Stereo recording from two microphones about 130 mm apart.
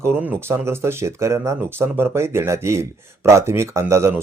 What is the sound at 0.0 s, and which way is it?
Speech, 15° right (ahead or behind).